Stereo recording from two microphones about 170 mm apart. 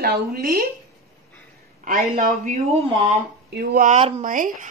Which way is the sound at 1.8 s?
50° right (ahead or behind).